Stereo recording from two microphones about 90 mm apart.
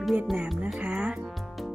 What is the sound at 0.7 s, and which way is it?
Music, 10° right (ahead or behind).